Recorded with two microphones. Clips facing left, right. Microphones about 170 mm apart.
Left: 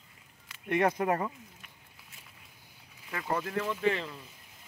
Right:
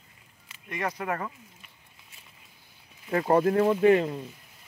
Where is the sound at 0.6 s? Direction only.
55° left (ahead or behind).